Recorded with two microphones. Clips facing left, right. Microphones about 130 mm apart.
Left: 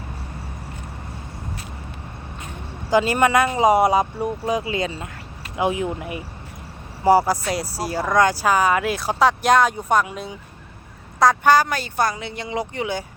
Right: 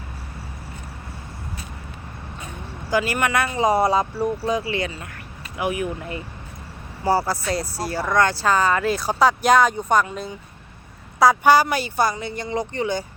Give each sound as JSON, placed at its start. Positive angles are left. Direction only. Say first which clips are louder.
{"t": 2.9, "sound": "speech", "louder": "left 4 dB", "side_deg": 25}
{"t": 11.2, "sound": "speech", "louder": "right 1 dB", "side_deg": -10}